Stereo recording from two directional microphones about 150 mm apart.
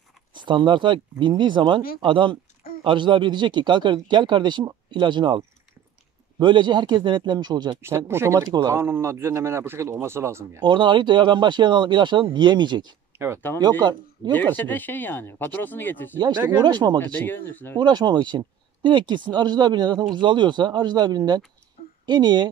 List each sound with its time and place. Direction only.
0.3 s a man's voice: 30° right (ahead or behind)
7.8 s speech: 15° right (ahead or behind)
10.6 s a man's voice: 30° right (ahead or behind)
13.1 s a sound: 15° right (ahead or behind)
13.6 s speech: 25° right (ahead or behind)
14.6 s speech: 10° left (ahead or behind)
16.5 s speech: 30° right (ahead or behind)
17.0 s speech: 15° left (ahead or behind)
17.7 s speech: 30° right (ahead or behind)